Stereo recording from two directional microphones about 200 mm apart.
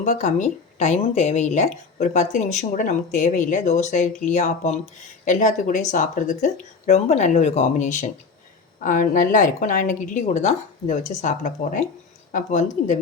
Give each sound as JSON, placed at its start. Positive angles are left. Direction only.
{"t": 0.0, "sound": "speech", "side_deg": 40}